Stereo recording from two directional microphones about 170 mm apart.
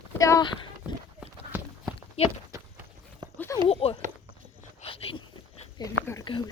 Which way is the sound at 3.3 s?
15° left (ahead or behind).